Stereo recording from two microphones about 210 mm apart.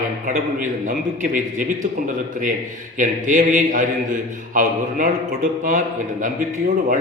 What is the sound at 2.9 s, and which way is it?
A man's voice, 40° right (ahead or behind).